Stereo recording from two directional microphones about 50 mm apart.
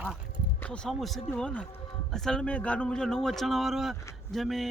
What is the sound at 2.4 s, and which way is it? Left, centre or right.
Speech, left.